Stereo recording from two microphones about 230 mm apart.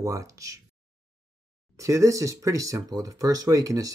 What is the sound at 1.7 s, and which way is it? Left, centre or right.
Speech, centre.